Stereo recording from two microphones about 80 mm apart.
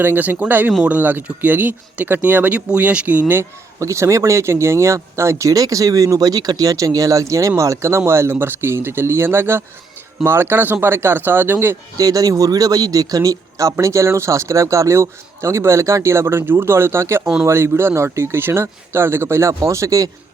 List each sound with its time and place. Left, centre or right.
0.0 s speech: right
3.8 s speech: right
11.9 s speech: right